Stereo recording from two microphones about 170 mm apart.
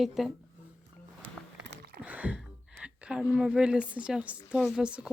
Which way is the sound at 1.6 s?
90° right.